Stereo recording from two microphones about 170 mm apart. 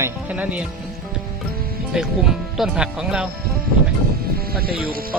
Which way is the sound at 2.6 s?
5° right (ahead or behind).